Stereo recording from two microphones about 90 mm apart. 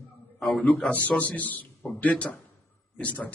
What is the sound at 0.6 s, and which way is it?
A man's voice, 10° left (ahead or behind).